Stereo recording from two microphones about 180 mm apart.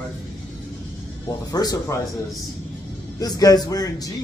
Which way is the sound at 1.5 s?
20° left (ahead or behind).